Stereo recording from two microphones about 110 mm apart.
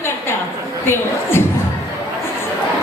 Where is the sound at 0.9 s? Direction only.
20° left (ahead or behind).